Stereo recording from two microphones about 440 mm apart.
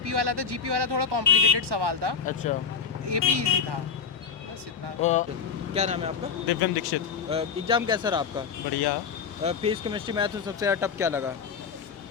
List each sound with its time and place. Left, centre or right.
0.0 s speech: right
2.2 s speech: centre
3.1 s speech: right
4.9 s speech: centre
5.7 s speech: centre
6.5 s speech: left
7.3 s speech: centre